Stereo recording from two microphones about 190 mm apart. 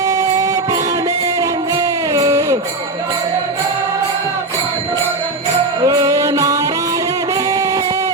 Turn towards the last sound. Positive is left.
turn(degrees=-20)  # may be behind; listen again after turning